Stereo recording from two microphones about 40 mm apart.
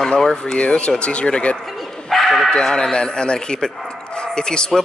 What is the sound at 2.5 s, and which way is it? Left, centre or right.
Speech, centre.